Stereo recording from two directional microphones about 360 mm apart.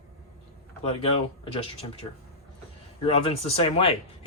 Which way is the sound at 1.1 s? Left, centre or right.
Centre.